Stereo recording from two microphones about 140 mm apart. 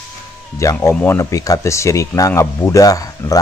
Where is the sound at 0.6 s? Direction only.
20° left (ahead or behind).